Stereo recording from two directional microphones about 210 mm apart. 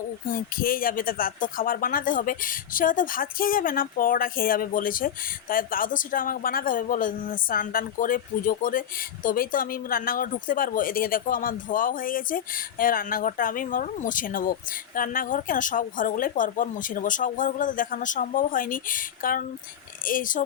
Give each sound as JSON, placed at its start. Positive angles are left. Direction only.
{"t": 0.3, "sound": "speech", "side_deg": 40}